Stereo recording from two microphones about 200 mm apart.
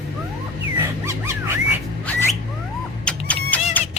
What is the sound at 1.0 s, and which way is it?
Music, 15° right (ahead or behind).